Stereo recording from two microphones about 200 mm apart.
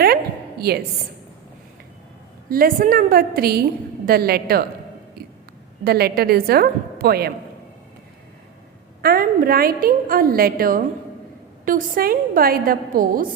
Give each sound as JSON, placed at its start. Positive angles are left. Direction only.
{"t": 0.6, "sound": "a woman's voice", "side_deg": -50}
{"t": 2.5, "sound": "a woman's voice", "side_deg": -45}
{"t": 5.8, "sound": "a woman's voice", "side_deg": -50}
{"t": 9.0, "sound": "a woman's voice", "side_deg": -50}